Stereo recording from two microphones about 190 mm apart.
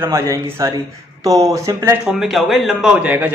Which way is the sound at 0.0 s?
15° right (ahead or behind).